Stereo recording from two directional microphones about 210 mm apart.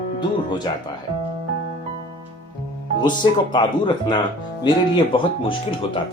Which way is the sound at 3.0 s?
20° left (ahead or behind).